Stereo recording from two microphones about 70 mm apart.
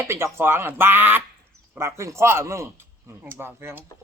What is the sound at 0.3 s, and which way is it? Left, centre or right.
Speech, right.